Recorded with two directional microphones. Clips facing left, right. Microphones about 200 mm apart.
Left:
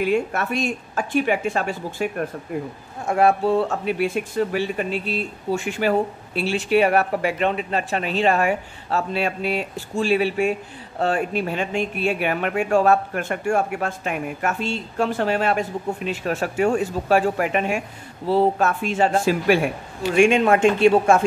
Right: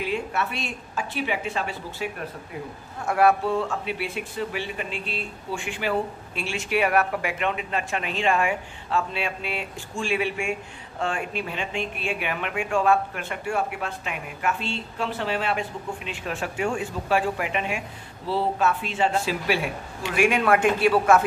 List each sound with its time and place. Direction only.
0.0 s speech: 50° left (ahead or behind)
3.1 s speech: 25° left (ahead or behind); by 20.2 s 40° left (ahead or behind)
20.2 s speech: 25° left (ahead or behind)